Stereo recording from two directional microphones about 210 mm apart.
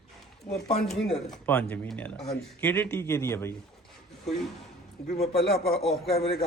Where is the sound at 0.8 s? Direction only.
Centre (ahead or behind).